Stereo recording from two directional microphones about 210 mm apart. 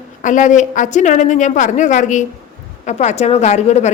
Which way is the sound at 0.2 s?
35° left (ahead or behind).